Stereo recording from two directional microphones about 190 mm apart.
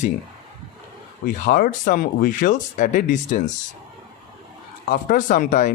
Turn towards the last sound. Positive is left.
turn(degrees=45)  # may be behind; listen again after turning